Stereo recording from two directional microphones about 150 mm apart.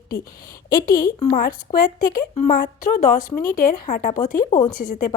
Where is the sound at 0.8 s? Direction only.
75° left (ahead or behind).